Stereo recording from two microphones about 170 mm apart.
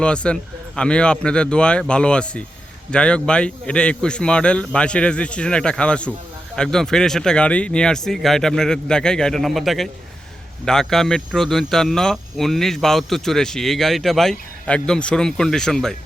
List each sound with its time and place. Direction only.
0.0 s a man's voice: 5° left (ahead or behind)